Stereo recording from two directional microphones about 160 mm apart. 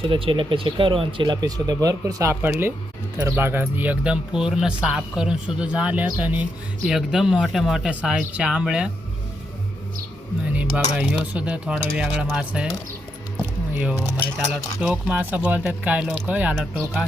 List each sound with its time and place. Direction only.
0.0 s speech: 35° right (ahead or behind); by 8.9 s 5° right (ahead or behind)
10.5 s speech: 10° right (ahead or behind)
13.7 s speech: 15° right (ahead or behind)